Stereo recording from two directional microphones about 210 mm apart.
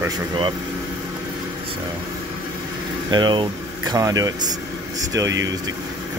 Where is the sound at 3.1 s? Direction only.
20° right (ahead or behind).